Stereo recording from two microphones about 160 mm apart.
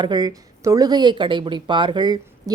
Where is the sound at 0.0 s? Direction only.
25° right (ahead or behind).